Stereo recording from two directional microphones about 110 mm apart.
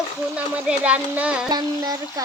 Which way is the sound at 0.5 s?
10° right (ahead or behind).